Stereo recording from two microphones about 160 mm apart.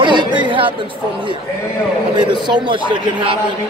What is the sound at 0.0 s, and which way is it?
Chatter, 30° right (ahead or behind).